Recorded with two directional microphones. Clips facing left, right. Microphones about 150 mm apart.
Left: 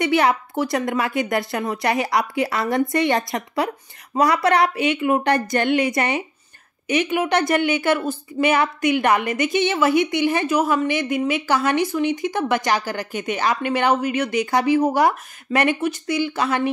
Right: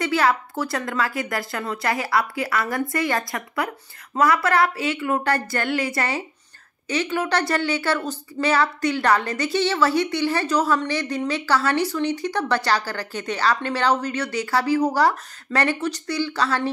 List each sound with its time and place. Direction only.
0.0 s a woman's voice: 20° left (ahead or behind)